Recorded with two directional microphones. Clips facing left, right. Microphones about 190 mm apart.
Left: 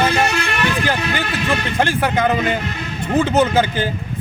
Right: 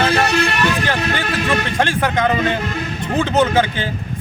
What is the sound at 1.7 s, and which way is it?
Speech, 5° left (ahead or behind).